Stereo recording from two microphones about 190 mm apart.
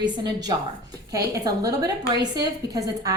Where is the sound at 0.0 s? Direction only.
20° right (ahead or behind).